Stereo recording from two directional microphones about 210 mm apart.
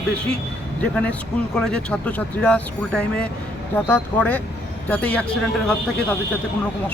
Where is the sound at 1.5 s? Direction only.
5° left (ahead or behind).